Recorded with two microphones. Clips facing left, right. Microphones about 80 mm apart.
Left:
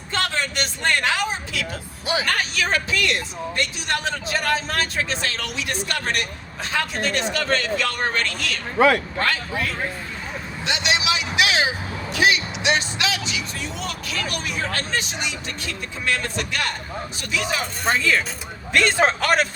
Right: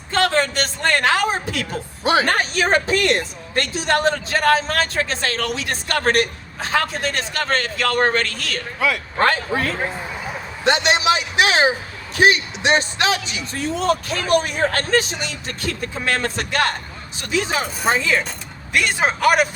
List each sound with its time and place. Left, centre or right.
0.1 s a man's voice: right
10.6 s vehicle: right
12.1 s speech: right
17.2 s speech: right
17.8 s a man's voice: centre